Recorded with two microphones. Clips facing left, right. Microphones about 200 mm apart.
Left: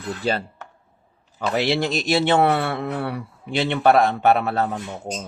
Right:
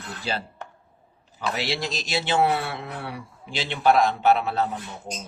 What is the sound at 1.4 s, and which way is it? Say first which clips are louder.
Speech: left 7 dB; 55° left (ahead or behind).